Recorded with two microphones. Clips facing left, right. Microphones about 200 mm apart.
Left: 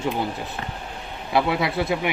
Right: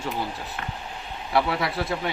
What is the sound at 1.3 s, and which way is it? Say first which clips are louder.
Speech: left 2 dB; 20° left (ahead or behind).